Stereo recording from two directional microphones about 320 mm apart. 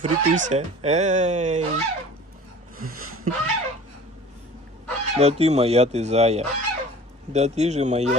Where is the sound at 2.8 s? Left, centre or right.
Right.